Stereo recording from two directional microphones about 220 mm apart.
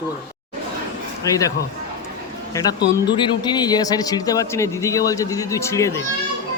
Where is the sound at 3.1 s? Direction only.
20° left (ahead or behind).